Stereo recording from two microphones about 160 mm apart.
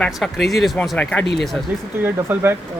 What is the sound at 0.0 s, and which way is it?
Speech, centre (ahead or behind).